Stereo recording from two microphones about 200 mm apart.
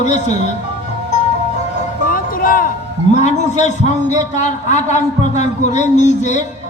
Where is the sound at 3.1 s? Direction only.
35° left (ahead or behind).